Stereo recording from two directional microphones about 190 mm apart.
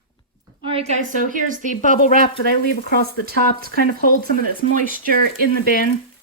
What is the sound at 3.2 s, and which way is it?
Speech, 55° right (ahead or behind).